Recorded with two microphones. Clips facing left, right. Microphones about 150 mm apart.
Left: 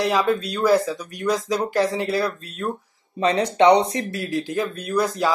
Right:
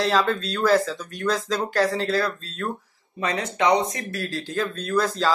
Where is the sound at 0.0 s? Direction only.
10° left (ahead or behind).